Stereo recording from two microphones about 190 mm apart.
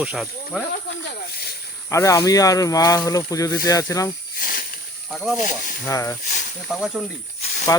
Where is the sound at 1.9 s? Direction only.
15° left (ahead or behind).